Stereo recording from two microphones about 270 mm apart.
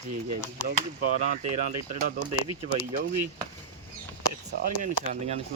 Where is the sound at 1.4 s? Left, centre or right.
Right.